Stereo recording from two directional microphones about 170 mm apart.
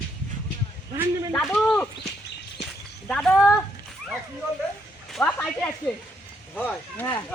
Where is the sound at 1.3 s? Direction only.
5° left (ahead or behind).